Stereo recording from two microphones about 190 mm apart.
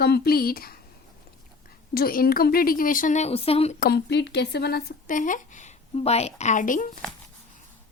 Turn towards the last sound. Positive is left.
turn(degrees=45)  # may be behind; listen again after turning